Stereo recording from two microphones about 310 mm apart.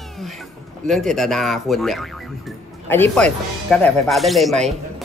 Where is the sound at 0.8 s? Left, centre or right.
Centre.